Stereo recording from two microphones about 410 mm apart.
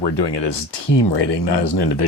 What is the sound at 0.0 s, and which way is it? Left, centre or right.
Speech, left.